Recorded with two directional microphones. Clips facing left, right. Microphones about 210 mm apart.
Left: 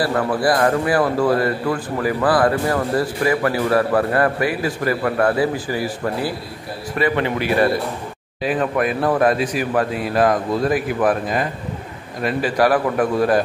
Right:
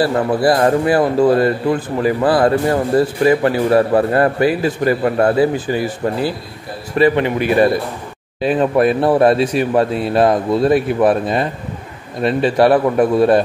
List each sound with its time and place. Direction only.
0.0 s a man's voice: 25° right (ahead or behind)